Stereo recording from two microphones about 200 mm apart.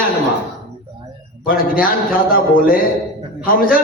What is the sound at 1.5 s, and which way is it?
A man's voice, 45° left (ahead or behind).